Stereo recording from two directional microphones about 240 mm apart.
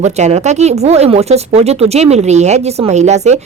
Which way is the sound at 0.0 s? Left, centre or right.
Right.